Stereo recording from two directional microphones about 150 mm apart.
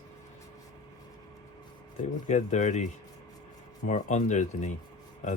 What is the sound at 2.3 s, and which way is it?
Speech, 50° left (ahead or behind).